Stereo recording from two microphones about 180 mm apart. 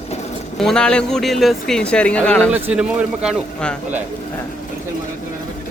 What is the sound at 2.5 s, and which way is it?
Speech, 5° right (ahead or behind).